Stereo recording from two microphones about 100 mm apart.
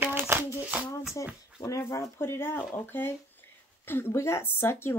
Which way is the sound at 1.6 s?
30° left (ahead or behind).